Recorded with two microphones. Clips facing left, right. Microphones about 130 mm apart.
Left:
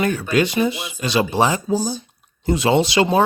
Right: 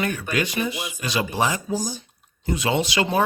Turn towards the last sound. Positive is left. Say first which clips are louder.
# left 5 dB
turn(degrees=30)  # may be behind; listen again after turning